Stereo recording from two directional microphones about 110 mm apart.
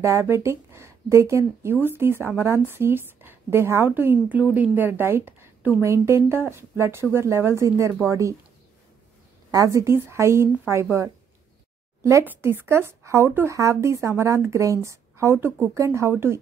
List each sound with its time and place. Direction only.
0.0 s speech: 25° right (ahead or behind)
9.5 s speech: 30° right (ahead or behind)